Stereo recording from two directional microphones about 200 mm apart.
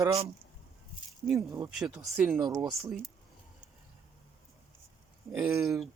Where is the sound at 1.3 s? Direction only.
15° right (ahead or behind).